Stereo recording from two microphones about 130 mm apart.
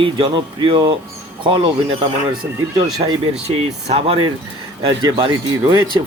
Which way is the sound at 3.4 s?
50° right (ahead or behind).